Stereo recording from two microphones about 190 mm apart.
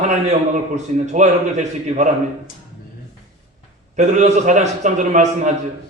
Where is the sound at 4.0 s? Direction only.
40° right (ahead or behind).